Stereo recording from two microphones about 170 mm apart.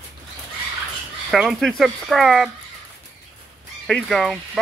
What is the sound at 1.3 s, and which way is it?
Speech, centre (ahead or behind).